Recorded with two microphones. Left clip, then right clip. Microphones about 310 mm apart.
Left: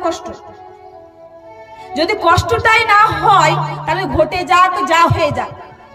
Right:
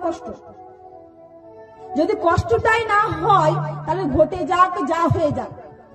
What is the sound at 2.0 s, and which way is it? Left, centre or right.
A woman's voice, left.